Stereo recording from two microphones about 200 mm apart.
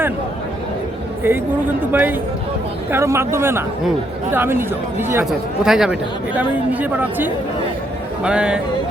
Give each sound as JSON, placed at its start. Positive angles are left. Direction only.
{"t": 1.2, "sound": "speech", "side_deg": -10}